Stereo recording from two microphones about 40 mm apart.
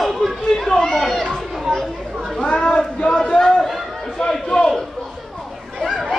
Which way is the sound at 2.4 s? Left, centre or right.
Left.